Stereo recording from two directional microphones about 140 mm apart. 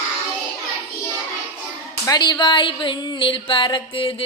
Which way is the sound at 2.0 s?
30° left (ahead or behind).